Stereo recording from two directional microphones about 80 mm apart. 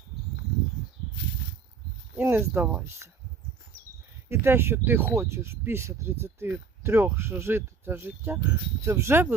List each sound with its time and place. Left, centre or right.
2.1 s speech: right
4.3 s speech: right